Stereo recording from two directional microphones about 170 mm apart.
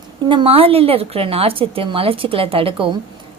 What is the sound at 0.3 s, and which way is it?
Speech, 35° right (ahead or behind).